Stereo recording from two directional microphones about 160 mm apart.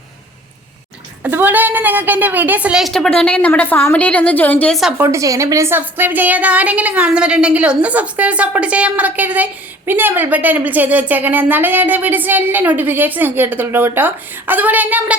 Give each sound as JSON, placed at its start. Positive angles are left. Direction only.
{"t": 1.2, "sound": "a woman's voice", "side_deg": -10}
{"t": 4.8, "sound": "a woman's voice", "side_deg": -5}
{"t": 5.0, "sound": "a woman's voice", "side_deg": -20}